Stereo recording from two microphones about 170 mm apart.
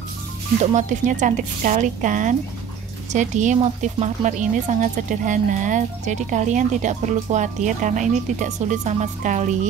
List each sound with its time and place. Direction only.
0.7 s speech: 45° right (ahead or behind)